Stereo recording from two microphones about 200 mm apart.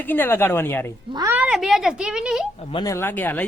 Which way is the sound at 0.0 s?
10° left (ahead or behind).